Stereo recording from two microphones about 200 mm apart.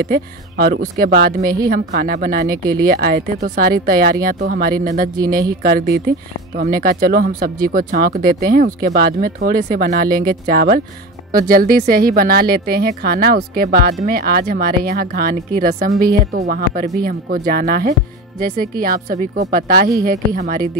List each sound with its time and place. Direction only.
0.0 s speech: 50° right (ahead or behind)